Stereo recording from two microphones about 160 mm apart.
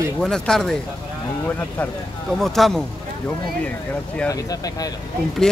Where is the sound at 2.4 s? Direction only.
Centre (ahead or behind).